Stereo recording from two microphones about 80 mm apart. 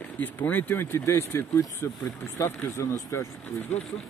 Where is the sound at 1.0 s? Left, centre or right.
Left.